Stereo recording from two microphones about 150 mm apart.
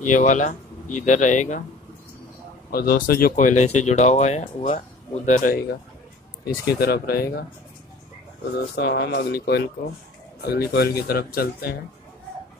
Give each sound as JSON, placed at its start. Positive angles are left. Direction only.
{"t": 0.0, "sound": "speech", "side_deg": 55}
{"t": 2.7, "sound": "speech", "side_deg": 90}
{"t": 5.2, "sound": "speech", "side_deg": 60}
{"t": 6.8, "sound": "speech", "side_deg": 90}
{"t": 8.5, "sound": "speech", "side_deg": 90}